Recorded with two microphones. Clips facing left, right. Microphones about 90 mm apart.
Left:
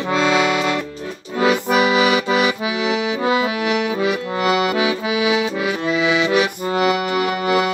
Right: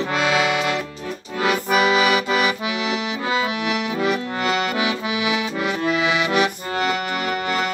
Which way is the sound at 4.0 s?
5° left (ahead or behind).